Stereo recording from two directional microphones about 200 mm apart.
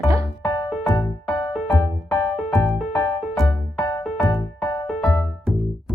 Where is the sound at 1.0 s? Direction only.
25° left (ahead or behind).